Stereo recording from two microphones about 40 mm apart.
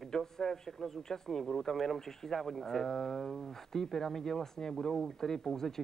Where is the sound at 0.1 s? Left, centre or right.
Centre.